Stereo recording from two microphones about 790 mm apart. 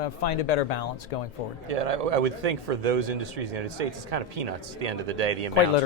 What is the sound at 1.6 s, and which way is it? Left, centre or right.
A man's voice, right.